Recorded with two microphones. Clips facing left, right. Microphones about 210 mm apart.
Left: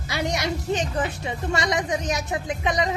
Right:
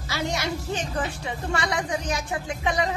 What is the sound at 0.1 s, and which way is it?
Speech, 20° left (ahead or behind).